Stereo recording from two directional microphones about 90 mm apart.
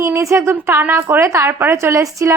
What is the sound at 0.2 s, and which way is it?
A woman's voice, 30° right (ahead or behind).